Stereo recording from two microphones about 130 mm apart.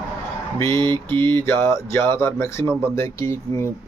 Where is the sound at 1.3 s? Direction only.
15° left (ahead or behind).